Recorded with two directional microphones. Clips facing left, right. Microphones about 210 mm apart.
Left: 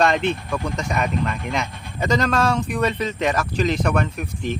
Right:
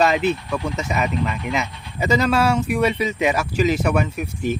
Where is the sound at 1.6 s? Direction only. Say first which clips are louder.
Left 1 dB; 50° left (ahead or behind).